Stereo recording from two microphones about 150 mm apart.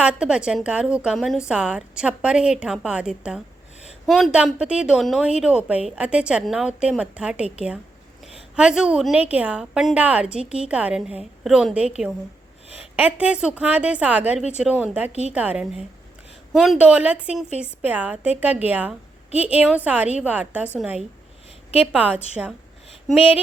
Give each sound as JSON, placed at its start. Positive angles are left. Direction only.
{"t": 0.0, "sound": "a woman's voice", "side_deg": -5}
{"t": 8.5, "sound": "a woman's voice", "side_deg": -5}
{"t": 13.0, "sound": "a woman's voice", "side_deg": -10}
{"t": 23.1, "sound": "a sound", "side_deg": 40}